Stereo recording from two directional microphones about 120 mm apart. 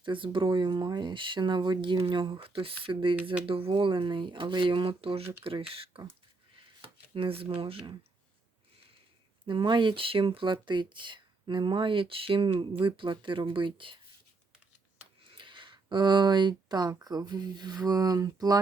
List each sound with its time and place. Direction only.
0.0 s speech: 45° right (ahead or behind)
7.1 s speech: 50° right (ahead or behind)
9.5 s speech: 40° right (ahead or behind)
15.4 s a sound: 45° right (ahead or behind)
17.0 s speech: 35° right (ahead or behind)